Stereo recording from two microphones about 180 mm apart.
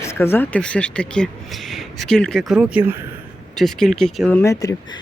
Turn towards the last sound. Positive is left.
turn(degrees=20)  # may be behind; listen again after turning